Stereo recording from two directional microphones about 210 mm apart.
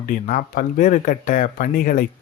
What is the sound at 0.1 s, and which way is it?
Speech, 40° left (ahead or behind).